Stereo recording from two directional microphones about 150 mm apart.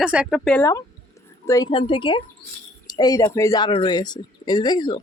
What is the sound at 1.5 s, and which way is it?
Speech, 30° left (ahead or behind).